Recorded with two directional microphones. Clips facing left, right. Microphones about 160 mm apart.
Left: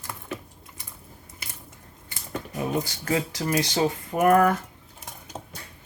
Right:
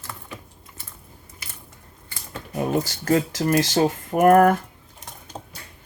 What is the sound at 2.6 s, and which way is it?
Speech, 50° right (ahead or behind).